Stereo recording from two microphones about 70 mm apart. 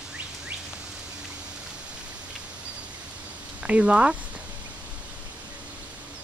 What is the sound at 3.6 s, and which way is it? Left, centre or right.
Speech, centre.